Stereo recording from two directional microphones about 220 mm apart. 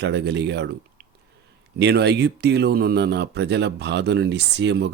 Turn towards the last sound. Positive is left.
turn(degrees=-50)  # may be behind; listen again after turning